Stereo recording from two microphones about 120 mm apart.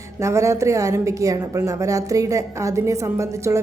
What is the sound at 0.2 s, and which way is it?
A woman's voice, 25° right (ahead or behind).